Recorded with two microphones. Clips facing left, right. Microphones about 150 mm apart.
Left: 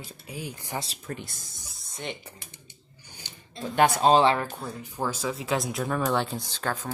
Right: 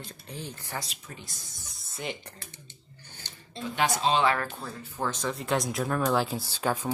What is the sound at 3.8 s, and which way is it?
Speech, 50° left (ahead or behind).